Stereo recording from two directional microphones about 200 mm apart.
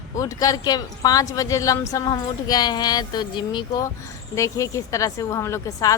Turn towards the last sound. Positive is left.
turn(degrees=15)  # may be behind; listen again after turning